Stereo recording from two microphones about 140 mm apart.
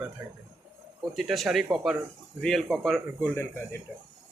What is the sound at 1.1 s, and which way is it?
Speech, centre (ahead or behind).